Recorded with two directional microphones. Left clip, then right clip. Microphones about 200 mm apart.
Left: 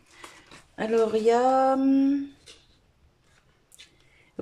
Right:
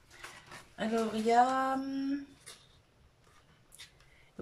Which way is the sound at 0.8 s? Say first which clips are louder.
Left 10 dB; 55° left (ahead or behind).